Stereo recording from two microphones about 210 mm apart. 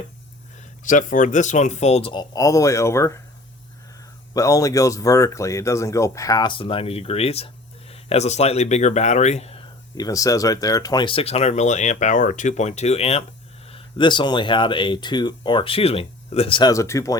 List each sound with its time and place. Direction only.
0.9 s speech: 40° left (ahead or behind); by 3.2 s 15° left (ahead or behind)
4.4 s speech: 15° left (ahead or behind)